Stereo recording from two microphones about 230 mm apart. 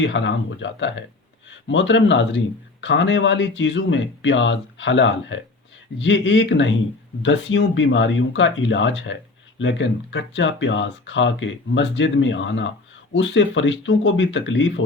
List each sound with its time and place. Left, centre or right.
0.0 s speech: left